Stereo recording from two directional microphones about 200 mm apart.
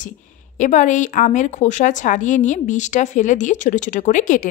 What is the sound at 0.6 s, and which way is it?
A woman's voice, 40° left (ahead or behind).